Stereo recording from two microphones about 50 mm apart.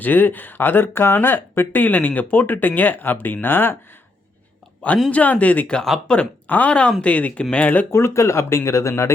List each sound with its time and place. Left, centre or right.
0.0 s speech: left
5.1 s speech: left
6.1 s speech: centre
6.5 s speech: left
7.9 s speech: left